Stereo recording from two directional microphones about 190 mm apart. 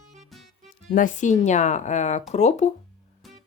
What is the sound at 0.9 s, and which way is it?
Speech, 45° left (ahead or behind).